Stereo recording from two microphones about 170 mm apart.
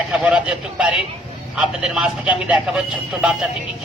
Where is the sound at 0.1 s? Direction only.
5° right (ahead or behind).